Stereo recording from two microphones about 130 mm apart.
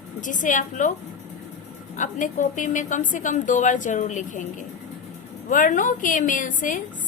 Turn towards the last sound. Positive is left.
turn(degrees=85)